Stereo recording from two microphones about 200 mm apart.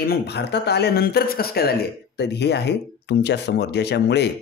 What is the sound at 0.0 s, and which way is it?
Speech, 55° left (ahead or behind).